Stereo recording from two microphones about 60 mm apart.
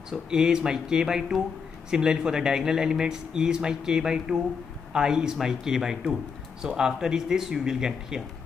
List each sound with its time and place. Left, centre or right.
0.1 s speech: centre